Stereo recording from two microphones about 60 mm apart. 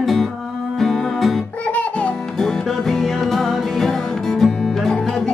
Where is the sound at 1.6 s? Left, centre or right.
Left.